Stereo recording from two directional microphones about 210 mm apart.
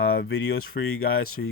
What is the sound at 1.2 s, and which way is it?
Speech, 85° left.